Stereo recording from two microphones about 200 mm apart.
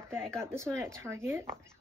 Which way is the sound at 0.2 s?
5° left (ahead or behind).